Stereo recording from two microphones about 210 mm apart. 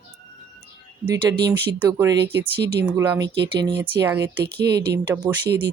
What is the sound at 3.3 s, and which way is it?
Speech, 55° right (ahead or behind).